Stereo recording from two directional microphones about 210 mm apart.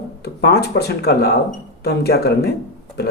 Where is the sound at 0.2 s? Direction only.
50° left (ahead or behind).